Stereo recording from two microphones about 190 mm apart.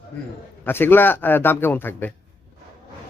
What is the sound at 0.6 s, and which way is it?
Speech, 10° left (ahead or behind).